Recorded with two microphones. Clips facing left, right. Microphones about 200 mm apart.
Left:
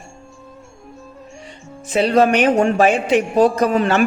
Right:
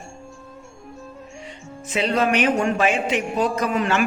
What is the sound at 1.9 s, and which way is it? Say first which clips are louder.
A woman's voice: left 6 dB; 35° left (ahead or behind).